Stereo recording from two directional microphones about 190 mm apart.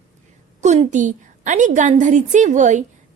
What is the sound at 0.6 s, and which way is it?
A woman's voice, 40° right (ahead or behind).